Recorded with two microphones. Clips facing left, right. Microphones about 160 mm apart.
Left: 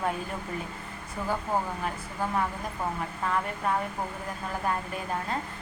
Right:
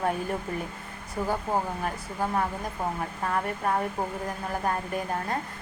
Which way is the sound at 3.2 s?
45° right (ahead or behind).